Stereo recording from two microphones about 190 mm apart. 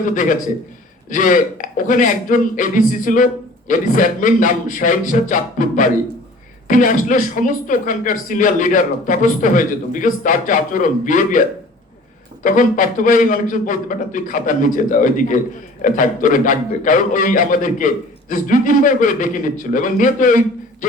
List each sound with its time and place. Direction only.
0.1 s speech: 45° left (ahead or behind)
12.4 s speech: 45° left (ahead or behind)